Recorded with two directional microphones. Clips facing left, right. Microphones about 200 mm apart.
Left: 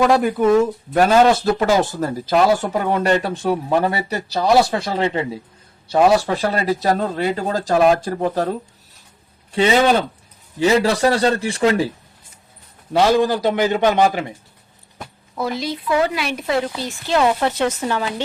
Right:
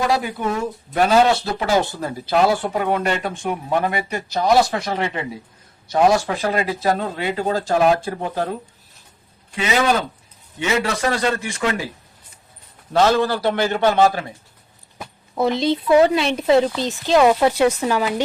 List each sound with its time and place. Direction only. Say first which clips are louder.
0.1 s speech: left 7 dB; 50° left (ahead or behind)
9.5 s speech: left 4 dB; 30° left (ahead or behind)
12.9 s a man's voice: left 1 dB; 10° left (ahead or behind)
15.4 s speech: right 5 dB; 25° right (ahead or behind)